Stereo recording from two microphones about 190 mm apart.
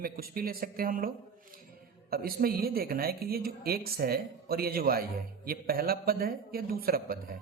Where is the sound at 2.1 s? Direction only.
50° right (ahead or behind).